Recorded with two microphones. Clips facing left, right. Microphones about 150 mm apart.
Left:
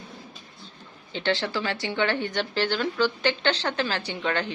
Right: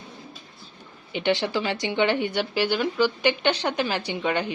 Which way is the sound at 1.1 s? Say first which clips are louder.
Right 3 dB; 15° right (ahead or behind).